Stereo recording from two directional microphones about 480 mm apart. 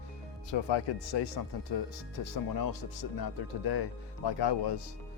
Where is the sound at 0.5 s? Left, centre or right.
Left.